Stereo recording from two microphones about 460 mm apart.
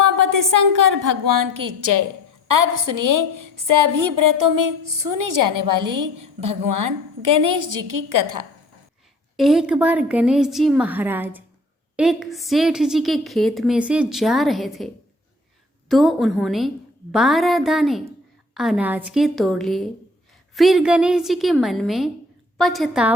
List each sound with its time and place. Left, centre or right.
0.0 s a woman's voice: right
9.3 s a woman's voice: centre
15.9 s a woman's voice: centre